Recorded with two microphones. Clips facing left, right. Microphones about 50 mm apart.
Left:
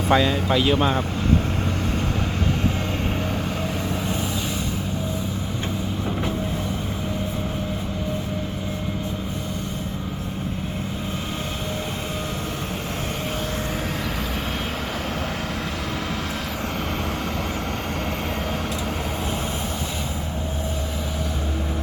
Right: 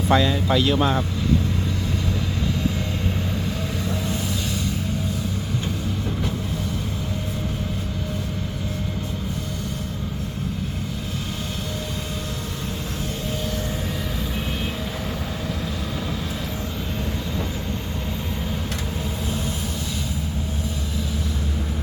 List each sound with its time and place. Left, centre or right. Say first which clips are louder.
0.1 s speech: even; centre